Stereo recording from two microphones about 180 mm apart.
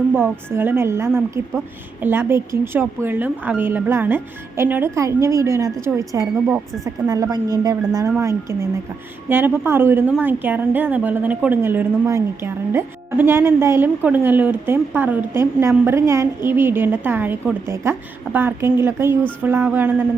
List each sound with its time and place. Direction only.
0.1 s a woman's voice: 10° right (ahead or behind)